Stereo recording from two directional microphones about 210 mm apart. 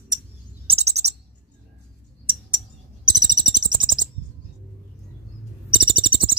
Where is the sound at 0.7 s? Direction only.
30° right (ahead or behind).